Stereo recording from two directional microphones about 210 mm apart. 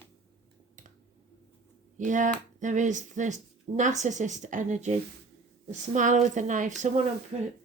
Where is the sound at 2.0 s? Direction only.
35° right (ahead or behind).